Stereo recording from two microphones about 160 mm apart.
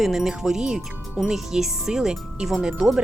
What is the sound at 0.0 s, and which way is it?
Speech, centre (ahead or behind).